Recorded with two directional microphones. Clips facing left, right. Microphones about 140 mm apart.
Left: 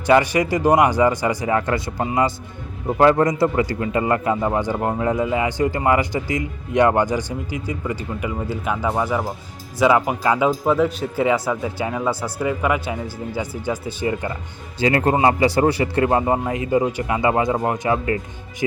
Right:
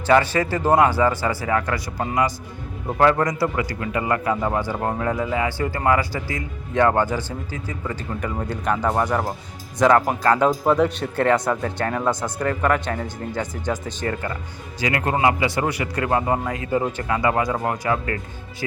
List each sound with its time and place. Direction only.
0.0 s a man's voice: 15° left (ahead or behind)
14.8 s a man's voice: 30° left (ahead or behind)